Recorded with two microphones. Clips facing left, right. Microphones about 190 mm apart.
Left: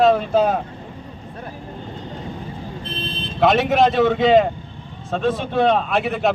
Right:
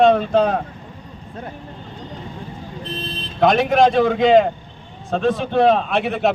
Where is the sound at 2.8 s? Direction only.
40° right (ahead or behind).